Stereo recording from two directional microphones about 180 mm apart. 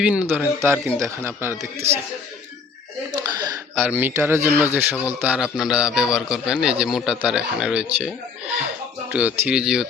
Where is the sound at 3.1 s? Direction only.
20° right (ahead or behind).